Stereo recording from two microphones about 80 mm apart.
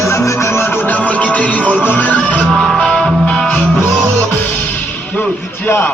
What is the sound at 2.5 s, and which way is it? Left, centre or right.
Music, centre.